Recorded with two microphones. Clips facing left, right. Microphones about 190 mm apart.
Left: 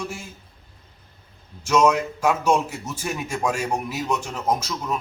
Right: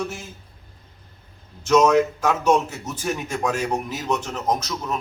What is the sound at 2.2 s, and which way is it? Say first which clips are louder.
A man's voice: right 1 dB; 10° left (ahead or behind).